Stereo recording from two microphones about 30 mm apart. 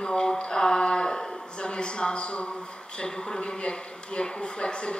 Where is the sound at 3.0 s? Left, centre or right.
Left.